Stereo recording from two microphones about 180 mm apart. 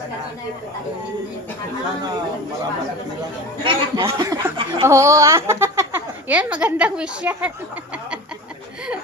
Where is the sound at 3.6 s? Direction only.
30° right (ahead or behind); by 7.5 s 5° right (ahead or behind).